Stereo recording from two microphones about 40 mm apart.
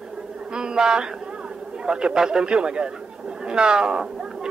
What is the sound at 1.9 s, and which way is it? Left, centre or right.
A man's voice, right.